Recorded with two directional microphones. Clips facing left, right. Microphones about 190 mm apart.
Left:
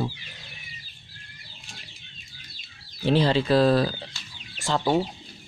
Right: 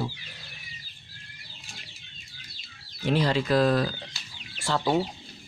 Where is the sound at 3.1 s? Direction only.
30° left (ahead or behind).